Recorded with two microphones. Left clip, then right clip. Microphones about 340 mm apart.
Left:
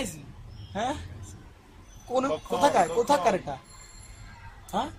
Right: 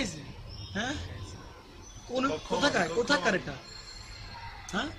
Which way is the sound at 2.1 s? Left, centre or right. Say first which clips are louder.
Left 3 dB; centre.